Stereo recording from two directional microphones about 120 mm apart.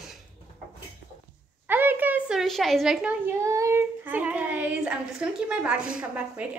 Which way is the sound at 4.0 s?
15° right (ahead or behind).